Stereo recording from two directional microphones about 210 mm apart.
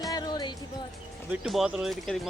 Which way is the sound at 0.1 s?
20° left (ahead or behind).